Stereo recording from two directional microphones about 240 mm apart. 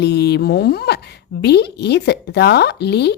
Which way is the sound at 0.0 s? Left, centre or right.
Left.